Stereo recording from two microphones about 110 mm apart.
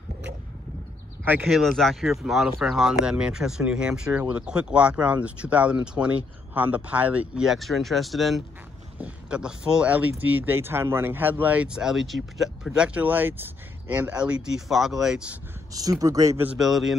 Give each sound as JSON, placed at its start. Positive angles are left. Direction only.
{"t": 1.2, "sound": "speech", "side_deg": -15}
{"t": 1.5, "sound": "speech", "side_deg": 5}
{"t": 15.7, "sound": "speech", "side_deg": -35}
{"t": 16.5, "sound": "speech", "side_deg": 0}